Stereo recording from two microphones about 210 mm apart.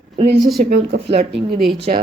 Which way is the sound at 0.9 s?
55° right (ahead or behind).